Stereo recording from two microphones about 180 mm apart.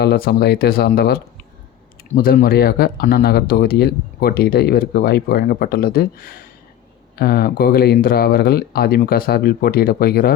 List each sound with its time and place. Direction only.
0.0 s speech: 60° left (ahead or behind)